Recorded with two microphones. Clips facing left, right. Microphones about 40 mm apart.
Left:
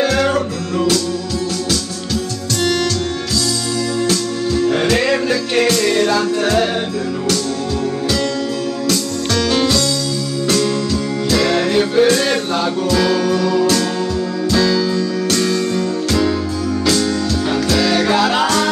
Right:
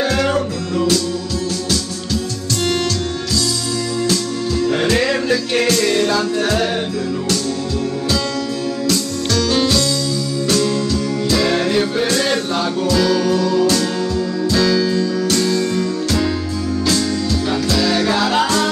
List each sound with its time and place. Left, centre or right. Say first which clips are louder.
0.0 s music: left 2 dB; centre
4.9 s music: left 1 dB; centre
9.3 s music: left 1 dB; left
13.6 s music: left 1 dB; centre
14.6 s music: right 1 dB; centre
17.7 s music: left 2 dB; centre